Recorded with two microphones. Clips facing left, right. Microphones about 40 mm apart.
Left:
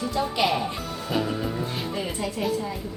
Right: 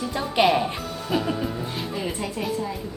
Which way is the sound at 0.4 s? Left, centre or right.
Centre.